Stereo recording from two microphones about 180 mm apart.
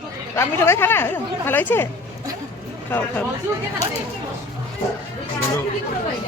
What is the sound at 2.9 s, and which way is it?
Speech, 10° left (ahead or behind).